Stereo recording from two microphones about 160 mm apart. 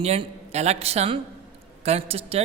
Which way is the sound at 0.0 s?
40° right (ahead or behind).